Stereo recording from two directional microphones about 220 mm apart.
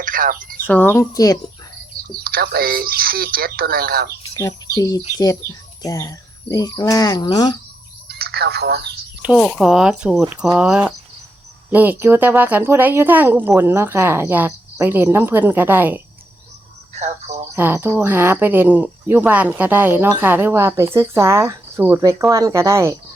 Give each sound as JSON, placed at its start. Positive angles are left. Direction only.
{"t": 0.0, "sound": "bird", "side_deg": -40}
{"t": 0.7, "sound": "speech", "side_deg": 10}
{"t": 2.2, "sound": "speech", "side_deg": -45}
{"t": 4.8, "sound": "speech", "side_deg": 15}
{"t": 8.0, "sound": "speech", "side_deg": -45}
{"t": 9.2, "sound": "speech", "side_deg": 0}
{"t": 17.0, "sound": "a sound", "side_deg": -30}
{"t": 17.5, "sound": "speech", "side_deg": -10}